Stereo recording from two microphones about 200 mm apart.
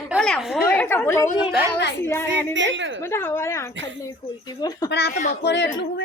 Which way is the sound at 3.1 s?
10° left (ahead or behind).